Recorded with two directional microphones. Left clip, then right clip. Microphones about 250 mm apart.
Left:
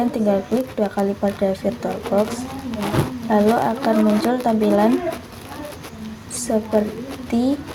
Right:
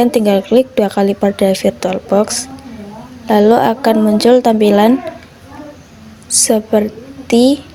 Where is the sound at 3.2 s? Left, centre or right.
Right.